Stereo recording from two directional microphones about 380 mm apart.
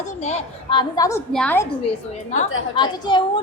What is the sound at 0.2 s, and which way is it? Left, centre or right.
A woman's voice, centre.